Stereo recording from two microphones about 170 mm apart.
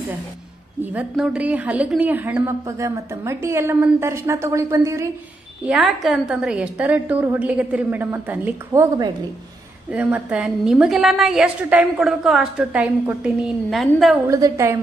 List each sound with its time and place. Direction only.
0.9 s a woman's voice: 5° right (ahead or behind)
5.7 s a woman's voice: centre (ahead or behind)
9.8 s a woman's voice: 10° right (ahead or behind)
14.2 s a woman's voice: 15° right (ahead or behind)